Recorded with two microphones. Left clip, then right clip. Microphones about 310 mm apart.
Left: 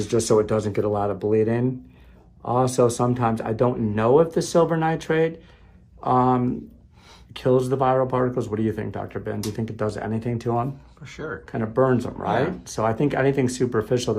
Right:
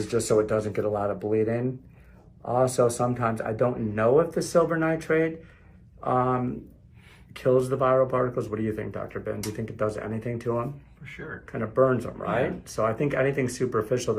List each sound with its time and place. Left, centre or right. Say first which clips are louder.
0.3 s speech: left 2 dB; left